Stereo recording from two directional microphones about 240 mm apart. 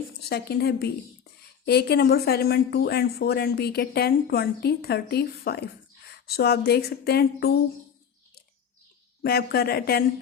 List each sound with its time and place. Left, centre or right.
0.2 s speech: left
9.2 s speech: left